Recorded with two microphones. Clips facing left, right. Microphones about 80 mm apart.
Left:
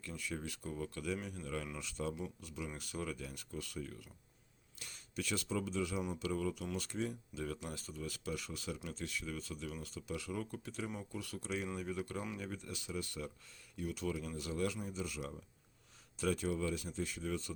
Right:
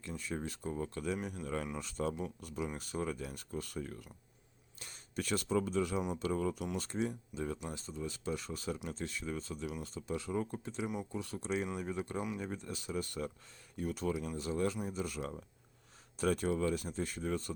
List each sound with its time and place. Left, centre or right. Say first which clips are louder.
0.0 s speech: right 3 dB; right
7.4 s speech: right 3 dB; right
14.1 s speech: right 4 dB; right
14.8 s speech: right 4 dB; right